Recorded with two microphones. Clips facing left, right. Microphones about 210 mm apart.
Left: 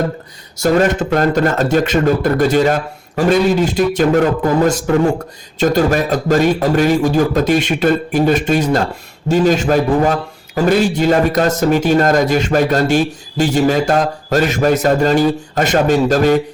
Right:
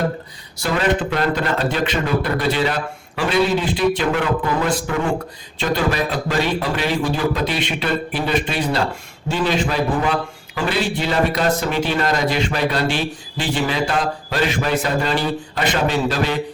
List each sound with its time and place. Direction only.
0.5 s a man's voice: 45° left (ahead or behind)